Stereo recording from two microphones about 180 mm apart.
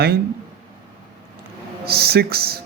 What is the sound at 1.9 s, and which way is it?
Speech, 60° right (ahead or behind).